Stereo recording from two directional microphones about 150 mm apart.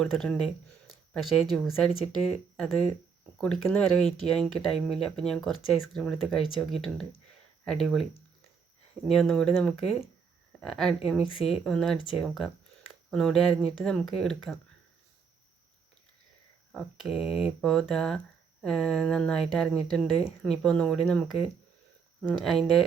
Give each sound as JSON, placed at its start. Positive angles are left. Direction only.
{"t": 0.0, "sound": "a woman's voice", "side_deg": 5}
{"t": 9.0, "sound": "a woman's voice", "side_deg": 0}
{"t": 11.3, "sound": "speech", "side_deg": 40}
{"t": 11.6, "sound": "a woman's voice", "side_deg": 0}
{"t": 16.7, "sound": "a woman's voice", "side_deg": -5}
{"t": 22.3, "sound": "a woman's voice", "side_deg": 0}